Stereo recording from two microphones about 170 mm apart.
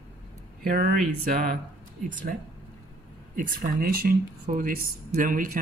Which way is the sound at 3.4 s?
55° right (ahead or behind).